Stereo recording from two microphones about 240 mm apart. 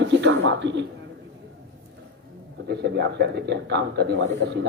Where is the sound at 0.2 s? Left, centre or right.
Right.